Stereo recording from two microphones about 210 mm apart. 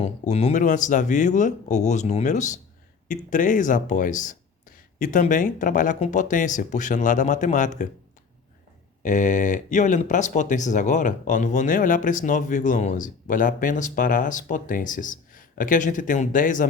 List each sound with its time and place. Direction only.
0.0 s speech: 30° left (ahead or behind)
9.0 s speech: 35° left (ahead or behind)